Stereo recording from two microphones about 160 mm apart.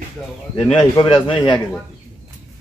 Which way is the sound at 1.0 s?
30° left (ahead or behind).